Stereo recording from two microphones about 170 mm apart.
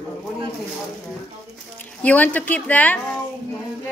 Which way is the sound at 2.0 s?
10° left (ahead or behind).